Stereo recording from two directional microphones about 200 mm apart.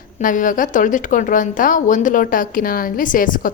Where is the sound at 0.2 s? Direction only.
40° left (ahead or behind).